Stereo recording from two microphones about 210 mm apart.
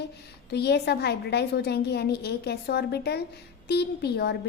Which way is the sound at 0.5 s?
50° left (ahead or behind).